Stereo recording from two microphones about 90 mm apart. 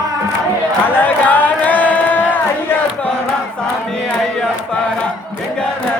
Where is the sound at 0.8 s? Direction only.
20° left (ahead or behind).